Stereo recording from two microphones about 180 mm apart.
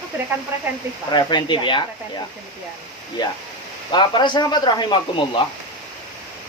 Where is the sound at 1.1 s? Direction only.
25° left (ahead or behind).